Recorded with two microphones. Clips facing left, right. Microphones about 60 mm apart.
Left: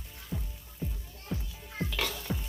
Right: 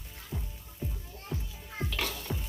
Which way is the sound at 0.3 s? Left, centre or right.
Centre.